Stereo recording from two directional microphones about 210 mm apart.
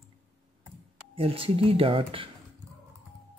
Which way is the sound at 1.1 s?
25° right (ahead or behind).